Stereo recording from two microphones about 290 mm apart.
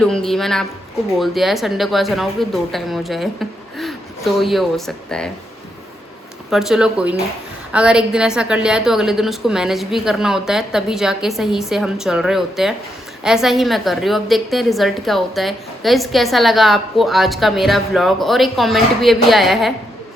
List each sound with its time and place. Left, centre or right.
0.0 s a woman's voice: centre
6.5 s a woman's voice: centre